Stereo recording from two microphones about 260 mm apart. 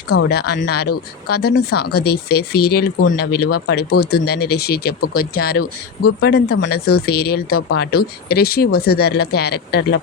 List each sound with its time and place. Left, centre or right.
0.3 s speech: left